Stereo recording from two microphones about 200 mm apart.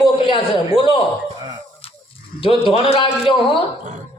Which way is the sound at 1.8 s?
30° left (ahead or behind).